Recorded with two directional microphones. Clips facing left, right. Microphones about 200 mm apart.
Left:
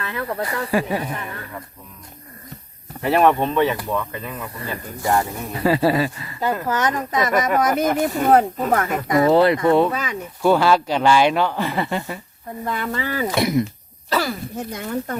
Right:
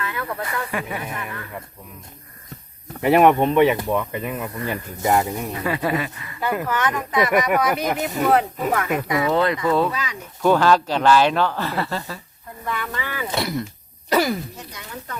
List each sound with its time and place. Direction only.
0.0 s speech: 30° left (ahead or behind)
3.0 s speech: 15° right (ahead or behind)
5.5 s speech: 35° left (ahead or behind)
9.3 s speech: 30° left (ahead or behind)
9.9 s speech: 50° left (ahead or behind)
10.4 s speech: 10° left (ahead or behind)
12.7 s speech: 40° left (ahead or behind)
13.4 s speech: 20° left (ahead or behind)
14.1 s speech: 20° right (ahead or behind)
14.5 s speech: 50° left (ahead or behind)